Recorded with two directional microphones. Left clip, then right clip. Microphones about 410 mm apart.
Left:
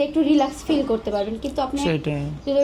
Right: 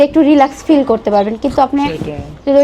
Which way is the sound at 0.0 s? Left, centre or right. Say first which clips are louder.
Right 10 dB; right.